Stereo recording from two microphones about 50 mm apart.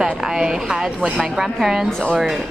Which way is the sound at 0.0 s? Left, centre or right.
Centre.